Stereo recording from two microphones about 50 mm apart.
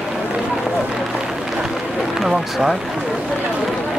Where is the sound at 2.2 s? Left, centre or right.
Centre.